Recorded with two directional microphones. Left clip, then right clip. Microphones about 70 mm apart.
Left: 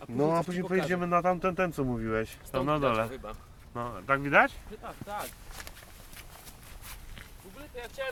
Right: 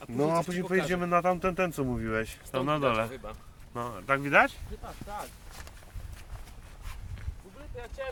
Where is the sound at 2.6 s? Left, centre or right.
Right.